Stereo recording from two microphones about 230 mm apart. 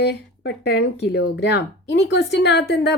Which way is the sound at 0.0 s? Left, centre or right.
Left.